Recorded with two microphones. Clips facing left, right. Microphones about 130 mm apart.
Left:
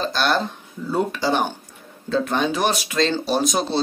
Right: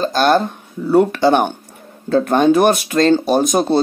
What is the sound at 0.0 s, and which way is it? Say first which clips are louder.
Speech: right 7 dB; 45° right (ahead or behind).